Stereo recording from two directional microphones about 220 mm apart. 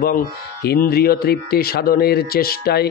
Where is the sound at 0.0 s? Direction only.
40° left (ahead or behind).